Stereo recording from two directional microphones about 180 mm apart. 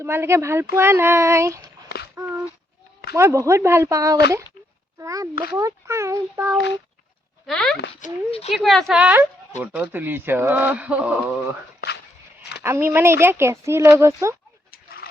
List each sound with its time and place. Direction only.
0.0 s speech: 15° right (ahead or behind)
2.1 s a sound: 15° right (ahead or behind)
3.1 s speech: 15° right (ahead or behind)
7.4 s speech: centre (ahead or behind)
8.0 s speech: 35° left (ahead or behind)
8.5 s a woman's voice: centre (ahead or behind)
12.6 s speech: 15° right (ahead or behind)
14.7 s a sound: 55° left (ahead or behind)